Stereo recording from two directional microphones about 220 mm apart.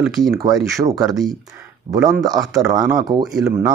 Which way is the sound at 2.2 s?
15° right (ahead or behind).